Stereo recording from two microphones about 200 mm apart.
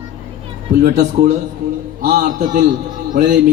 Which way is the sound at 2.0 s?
40° right (ahead or behind).